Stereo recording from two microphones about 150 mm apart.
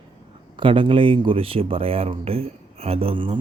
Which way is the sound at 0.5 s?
35° right (ahead or behind).